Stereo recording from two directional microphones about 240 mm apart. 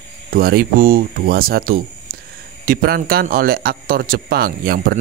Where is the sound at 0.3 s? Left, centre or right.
Right.